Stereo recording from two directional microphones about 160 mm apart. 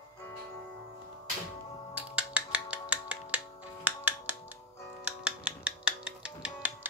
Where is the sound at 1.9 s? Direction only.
10° right (ahead or behind).